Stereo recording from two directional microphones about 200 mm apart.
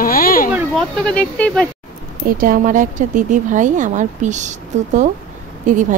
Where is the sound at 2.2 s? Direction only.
45° right (ahead or behind).